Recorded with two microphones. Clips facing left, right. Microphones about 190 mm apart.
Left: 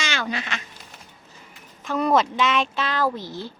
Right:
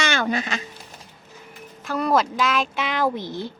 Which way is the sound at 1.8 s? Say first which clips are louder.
Left 1 dB; centre (ahead or behind).